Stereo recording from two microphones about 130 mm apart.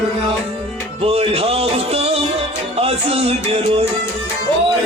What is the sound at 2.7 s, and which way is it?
Music, 50° right (ahead or behind).